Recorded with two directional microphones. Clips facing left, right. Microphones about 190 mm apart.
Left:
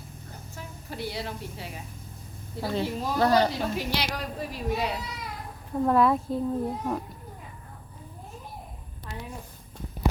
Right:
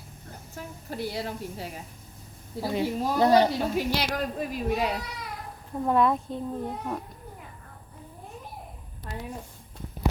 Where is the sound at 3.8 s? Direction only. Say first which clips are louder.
Right 3 dB; 50° right (ahead or behind).